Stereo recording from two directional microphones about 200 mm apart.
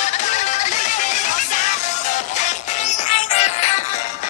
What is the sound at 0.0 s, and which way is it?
Music, 35° left (ahead or behind).